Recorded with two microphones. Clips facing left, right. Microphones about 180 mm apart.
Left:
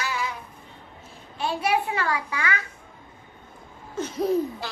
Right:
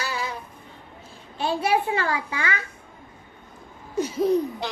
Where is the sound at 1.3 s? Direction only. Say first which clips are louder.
Right 2 dB; 30° right (ahead or behind).